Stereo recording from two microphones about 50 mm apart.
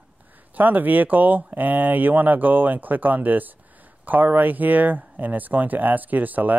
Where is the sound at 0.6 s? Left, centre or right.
Right.